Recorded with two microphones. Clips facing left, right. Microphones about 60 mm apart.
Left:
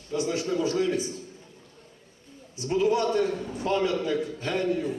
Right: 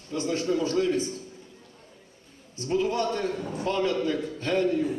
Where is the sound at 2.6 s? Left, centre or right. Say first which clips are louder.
Left 2 dB; centre.